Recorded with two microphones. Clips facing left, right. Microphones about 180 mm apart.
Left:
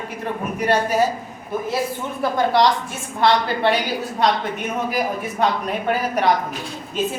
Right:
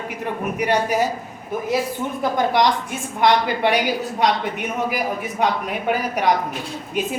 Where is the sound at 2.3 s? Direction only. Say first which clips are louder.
Left 2 dB; 15° right (ahead or behind).